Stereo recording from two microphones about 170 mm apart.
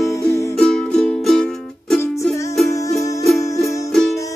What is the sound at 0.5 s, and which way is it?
Music, 5° left (ahead or behind).